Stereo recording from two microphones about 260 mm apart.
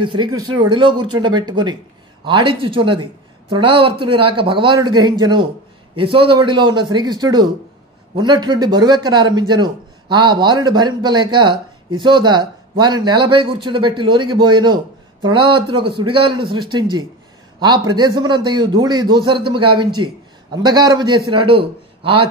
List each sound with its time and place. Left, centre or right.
0.0 s a man's voice: centre